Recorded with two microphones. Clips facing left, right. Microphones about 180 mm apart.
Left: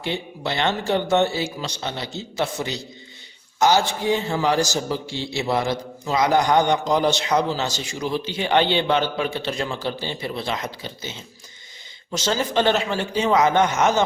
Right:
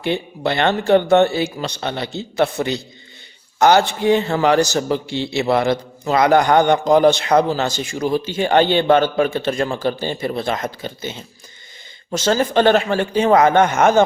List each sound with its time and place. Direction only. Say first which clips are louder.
0.0 s a man's voice: right 6 dB; 55° right (ahead or behind)